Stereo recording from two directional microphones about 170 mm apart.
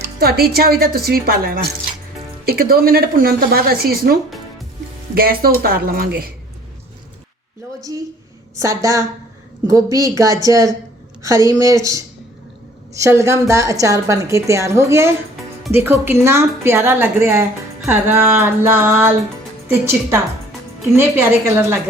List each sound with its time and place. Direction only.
0.2 s a woman's voice: 65° right (ahead or behind)
8.5 s a woman's voice: 20° right (ahead or behind)